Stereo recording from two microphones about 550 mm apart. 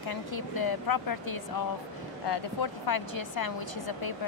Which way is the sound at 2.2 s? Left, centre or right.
Left.